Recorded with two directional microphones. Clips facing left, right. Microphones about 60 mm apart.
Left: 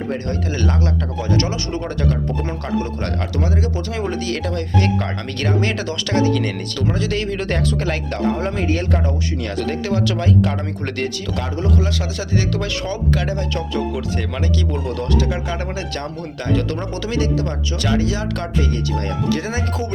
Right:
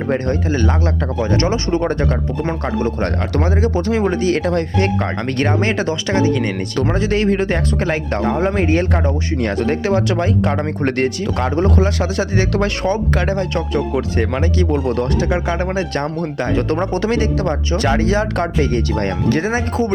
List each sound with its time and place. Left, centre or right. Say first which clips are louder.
0.1 s speech: right 8 dB; right
0.5 s speech: right 3 dB; centre
1.2 s speech: right 4 dB; right
19.4 s speech: right 6 dB; right